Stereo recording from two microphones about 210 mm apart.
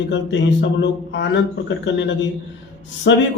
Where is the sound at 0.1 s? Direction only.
55° left (ahead or behind).